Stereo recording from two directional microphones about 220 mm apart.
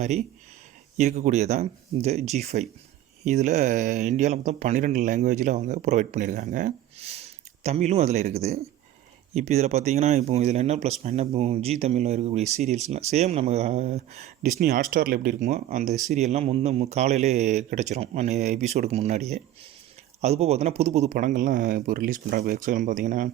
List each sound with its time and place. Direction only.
0.0 s speech: 30° right (ahead or behind)
14.6 s speech: 40° right (ahead or behind)